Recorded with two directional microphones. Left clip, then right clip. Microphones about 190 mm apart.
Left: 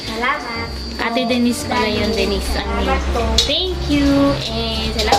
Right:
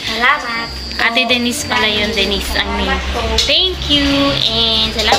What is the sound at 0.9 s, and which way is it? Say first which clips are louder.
Speech: right 5 dB; 20° left (ahead or behind).